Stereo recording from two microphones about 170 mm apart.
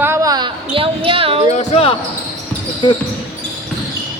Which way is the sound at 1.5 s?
35° left (ahead or behind).